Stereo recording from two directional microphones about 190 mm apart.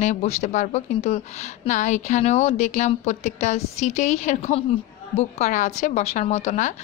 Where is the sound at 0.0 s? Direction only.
35° left (ahead or behind).